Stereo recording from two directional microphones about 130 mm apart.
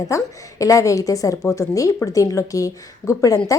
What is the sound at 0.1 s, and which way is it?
Speech, 25° left (ahead or behind).